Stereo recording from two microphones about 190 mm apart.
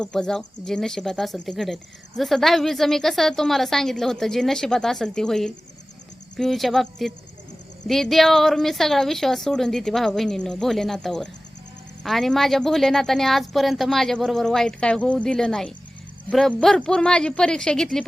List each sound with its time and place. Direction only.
0.0 s speech: centre (ahead or behind)